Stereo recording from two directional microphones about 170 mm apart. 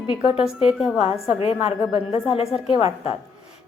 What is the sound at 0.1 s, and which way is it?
Speech, 30° left (ahead or behind).